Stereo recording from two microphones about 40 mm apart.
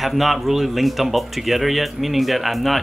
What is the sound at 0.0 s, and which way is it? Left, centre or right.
Speech, centre.